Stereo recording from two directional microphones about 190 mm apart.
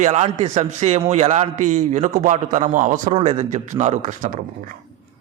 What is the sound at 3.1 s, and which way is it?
A man's voice, 30° right (ahead or behind).